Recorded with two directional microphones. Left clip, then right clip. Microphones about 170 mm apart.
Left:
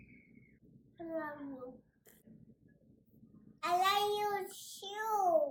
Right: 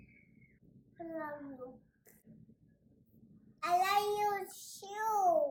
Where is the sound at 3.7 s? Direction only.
Centre (ahead or behind).